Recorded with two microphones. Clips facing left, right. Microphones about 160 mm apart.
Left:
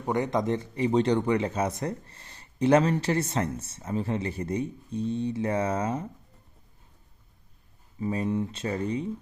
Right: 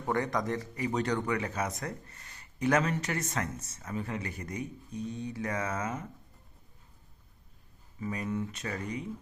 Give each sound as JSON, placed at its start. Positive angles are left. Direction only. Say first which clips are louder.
{"t": 0.0, "sound": "speech", "louder": "left 4 dB", "side_deg": 20}
{"t": 8.0, "sound": "speech", "louder": "left 6 dB", "side_deg": 30}